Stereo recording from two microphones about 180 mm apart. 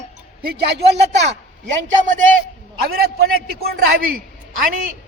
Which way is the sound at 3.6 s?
60° right (ahead or behind).